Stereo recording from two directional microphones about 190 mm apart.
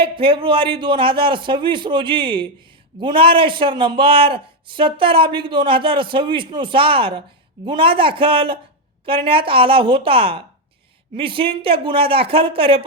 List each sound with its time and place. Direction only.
0.0 s a man's voice: 25° right (ahead or behind)